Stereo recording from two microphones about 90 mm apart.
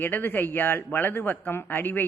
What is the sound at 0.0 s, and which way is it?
A man's voice, 20° left (ahead or behind).